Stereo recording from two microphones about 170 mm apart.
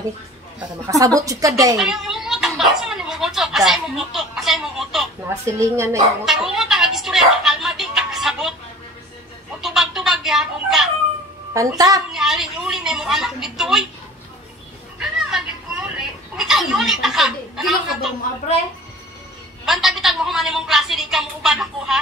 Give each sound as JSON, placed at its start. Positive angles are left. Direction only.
{"t": 0.8, "sound": "a woman's voice", "side_deg": -20}
{"t": 1.8, "sound": "a sound", "side_deg": 0}
{"t": 5.3, "sound": "a woman's voice", "side_deg": -15}
{"t": 6.2, "sound": "music", "side_deg": 0}
{"t": 9.6, "sound": "a sound", "side_deg": 0}
{"t": 11.5, "sound": "a woman's voice", "side_deg": -20}
{"t": 12.1, "sound": "a woman's voice", "side_deg": 0}
{"t": 15.0, "sound": "children playing", "side_deg": -5}
{"t": 16.3, "sound": "a woman's voice", "side_deg": 0}
{"t": 19.6, "sound": "a woman's voice", "side_deg": 0}